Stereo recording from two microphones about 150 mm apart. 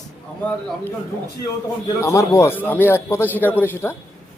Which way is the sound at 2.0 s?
20° left (ahead or behind).